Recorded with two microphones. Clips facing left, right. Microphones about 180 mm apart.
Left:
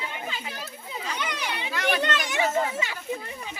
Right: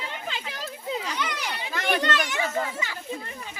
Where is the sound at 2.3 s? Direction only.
20° left (ahead or behind).